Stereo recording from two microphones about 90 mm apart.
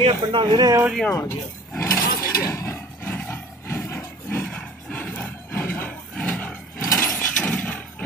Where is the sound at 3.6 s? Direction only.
25° left (ahead or behind); by 6.5 s 10° left (ahead or behind).